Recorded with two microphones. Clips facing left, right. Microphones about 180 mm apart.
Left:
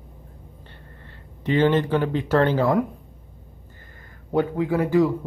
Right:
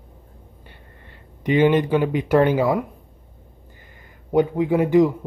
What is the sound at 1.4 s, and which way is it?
Speech, 15° right (ahead or behind).